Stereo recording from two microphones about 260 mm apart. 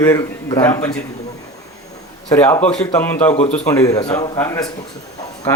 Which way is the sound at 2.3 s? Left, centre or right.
Centre.